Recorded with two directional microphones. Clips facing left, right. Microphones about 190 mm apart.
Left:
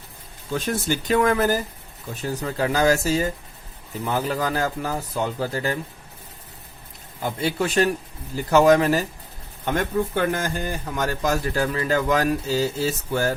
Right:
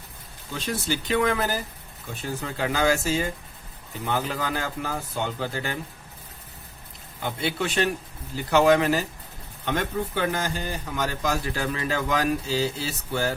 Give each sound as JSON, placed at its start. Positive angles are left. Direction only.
{"t": 0.5, "sound": "a man's voice", "side_deg": 50}
{"t": 7.2, "sound": "a man's voice", "side_deg": 40}